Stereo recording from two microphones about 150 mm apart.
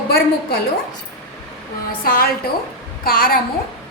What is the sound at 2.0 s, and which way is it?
A woman's voice, 75° left (ahead or behind).